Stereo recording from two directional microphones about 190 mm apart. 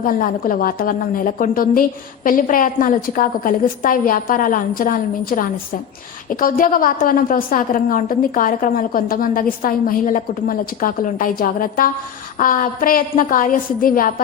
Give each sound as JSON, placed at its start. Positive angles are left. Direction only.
{"t": 0.0, "sound": "a woman's voice", "side_deg": 45}